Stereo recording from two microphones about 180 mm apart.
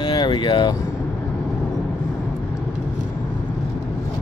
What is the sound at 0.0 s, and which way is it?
Speech, 25° left (ahead or behind).